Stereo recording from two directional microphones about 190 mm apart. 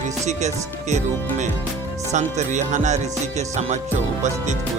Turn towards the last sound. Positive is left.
turn(degrees=-35)  # may be behind; listen again after turning